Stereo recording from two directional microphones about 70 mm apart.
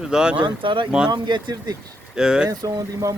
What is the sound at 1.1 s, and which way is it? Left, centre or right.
Speech, right.